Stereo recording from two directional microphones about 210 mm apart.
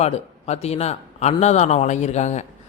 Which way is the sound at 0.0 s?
30° left (ahead or behind).